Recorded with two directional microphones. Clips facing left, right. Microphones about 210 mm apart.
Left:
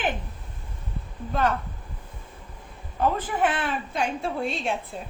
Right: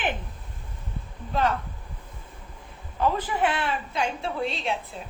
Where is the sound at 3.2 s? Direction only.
50° left (ahead or behind).